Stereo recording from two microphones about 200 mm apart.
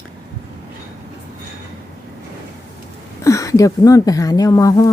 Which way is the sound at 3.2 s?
15° left (ahead or behind).